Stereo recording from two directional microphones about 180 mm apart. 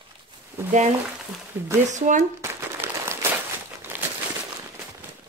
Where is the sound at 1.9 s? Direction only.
45° right (ahead or behind).